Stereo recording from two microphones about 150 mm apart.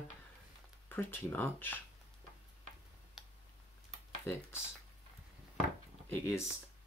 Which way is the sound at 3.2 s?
5° right (ahead or behind).